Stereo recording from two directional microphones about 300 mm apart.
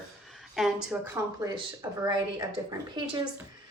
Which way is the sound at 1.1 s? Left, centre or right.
Centre.